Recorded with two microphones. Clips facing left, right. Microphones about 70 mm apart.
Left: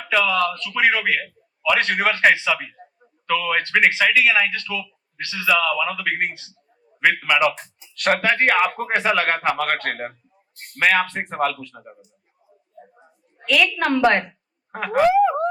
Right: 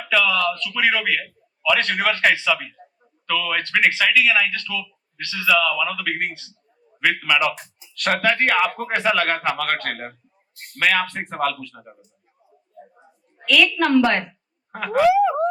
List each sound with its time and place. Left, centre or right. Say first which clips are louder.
0.1 s speech: even; left
0.6 s speech: left 2 dB; left
7.2 s a man's voice: left 2 dB; centre
7.5 s speech: right 1 dB; left
7.9 s speech: left 1 dB; left
13.4 s speech: right 1 dB; left
14.7 s speech: even; left